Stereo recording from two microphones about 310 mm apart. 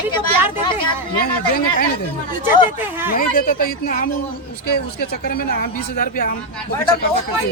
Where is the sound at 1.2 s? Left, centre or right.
Left.